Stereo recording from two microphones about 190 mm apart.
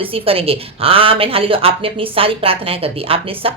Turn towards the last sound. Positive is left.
turn(degrees=-30)  # may be behind; listen again after turning